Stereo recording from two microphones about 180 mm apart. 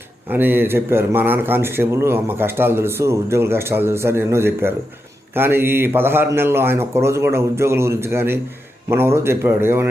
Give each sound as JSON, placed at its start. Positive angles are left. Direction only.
{"t": 0.3, "sound": "speech", "side_deg": -10}